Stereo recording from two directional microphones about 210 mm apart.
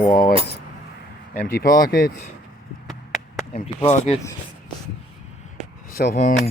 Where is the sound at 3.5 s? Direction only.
30° left (ahead or behind).